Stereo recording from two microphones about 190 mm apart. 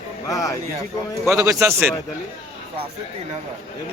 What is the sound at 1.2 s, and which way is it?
Speech, 20° right (ahead or behind).